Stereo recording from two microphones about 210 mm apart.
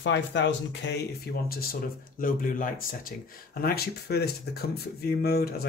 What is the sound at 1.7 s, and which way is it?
Speech, 40° left (ahead or behind).